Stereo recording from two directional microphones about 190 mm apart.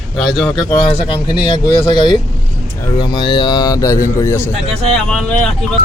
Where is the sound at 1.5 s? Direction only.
25° left (ahead or behind).